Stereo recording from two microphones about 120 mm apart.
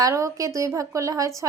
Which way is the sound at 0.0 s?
30° right (ahead or behind).